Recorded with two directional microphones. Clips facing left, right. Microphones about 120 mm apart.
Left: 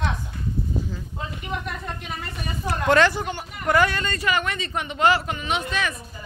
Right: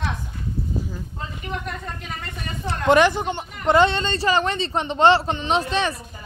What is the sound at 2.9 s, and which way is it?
Speech, 20° right (ahead or behind).